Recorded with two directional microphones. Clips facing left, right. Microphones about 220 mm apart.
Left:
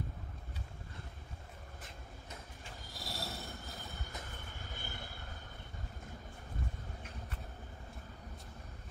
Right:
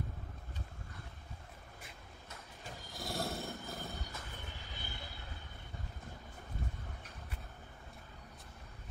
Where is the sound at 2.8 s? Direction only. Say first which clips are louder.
Right 6 dB; 50° right (ahead or behind).